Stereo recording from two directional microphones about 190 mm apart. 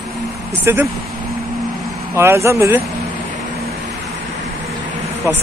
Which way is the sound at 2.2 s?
15° right (ahead or behind).